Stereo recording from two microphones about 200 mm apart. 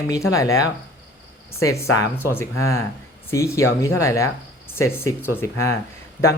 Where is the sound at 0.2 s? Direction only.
15° left (ahead or behind).